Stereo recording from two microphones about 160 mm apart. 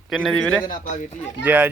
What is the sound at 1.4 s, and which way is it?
Speech, 10° right (ahead or behind).